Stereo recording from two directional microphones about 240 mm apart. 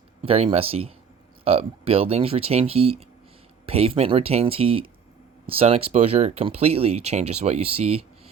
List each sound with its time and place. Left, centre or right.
0.2 s speech: right